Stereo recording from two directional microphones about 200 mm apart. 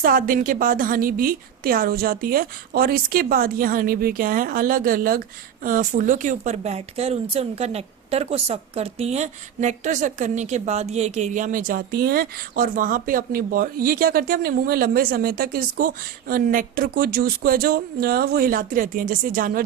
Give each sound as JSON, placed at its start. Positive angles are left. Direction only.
{"t": 0.0, "sound": "a woman's voice", "side_deg": -45}